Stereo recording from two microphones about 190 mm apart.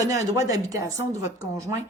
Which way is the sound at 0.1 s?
15° right (ahead or behind).